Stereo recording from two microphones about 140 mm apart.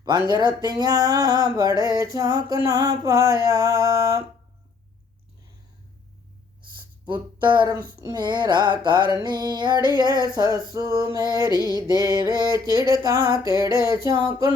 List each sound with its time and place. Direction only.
0.0 s music: 30° right (ahead or behind)
7.0 s a sound: 35° right (ahead or behind)
7.9 s music: 30° right (ahead or behind)